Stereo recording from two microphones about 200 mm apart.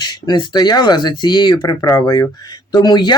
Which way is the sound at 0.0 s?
20° left (ahead or behind).